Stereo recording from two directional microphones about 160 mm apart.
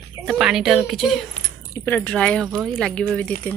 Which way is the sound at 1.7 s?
15° left (ahead or behind).